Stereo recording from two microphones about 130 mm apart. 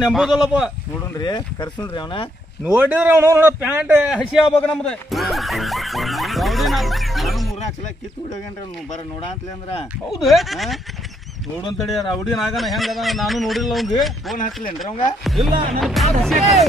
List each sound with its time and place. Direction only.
0.0 s speech: 5° right (ahead or behind)
1.2 s speech: 30° left (ahead or behind)
2.6 s a man's voice: 15° right (ahead or behind); by 7.5 s centre (ahead or behind)
8.9 s speech: 55° left (ahead or behind)
10.1 s speech: centre (ahead or behind)
11.9 s speech: centre (ahead or behind)